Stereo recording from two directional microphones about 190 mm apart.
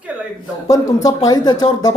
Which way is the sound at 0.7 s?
20° left (ahead or behind).